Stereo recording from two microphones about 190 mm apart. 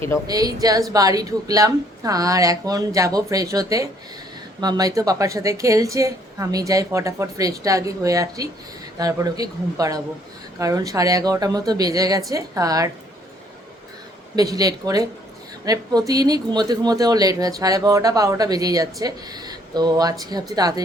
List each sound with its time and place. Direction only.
0.3 s a woman's voice: 20° right (ahead or behind)
14.3 s speech: 20° right (ahead or behind)